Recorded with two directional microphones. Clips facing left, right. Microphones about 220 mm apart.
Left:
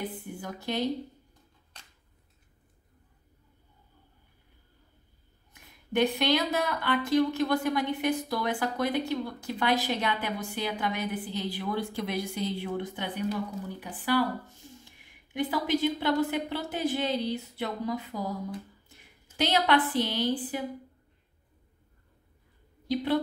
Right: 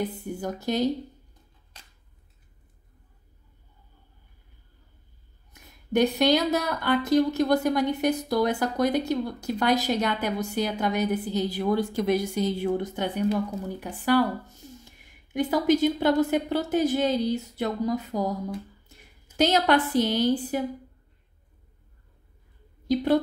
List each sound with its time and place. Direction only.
0.4 s speech: 40° right (ahead or behind)
5.5 s speech: 40° right (ahead or behind)
19.3 s speech: 45° right (ahead or behind)
22.8 s speech: 45° right (ahead or behind)